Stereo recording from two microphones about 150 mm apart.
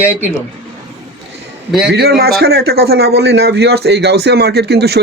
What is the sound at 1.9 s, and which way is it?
A man's voice, 90° right.